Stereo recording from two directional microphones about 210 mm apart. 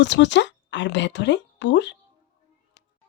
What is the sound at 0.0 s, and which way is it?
Speech, 60° left (ahead or behind).